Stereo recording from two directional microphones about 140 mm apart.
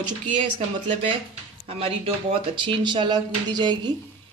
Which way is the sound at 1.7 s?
45° right (ahead or behind).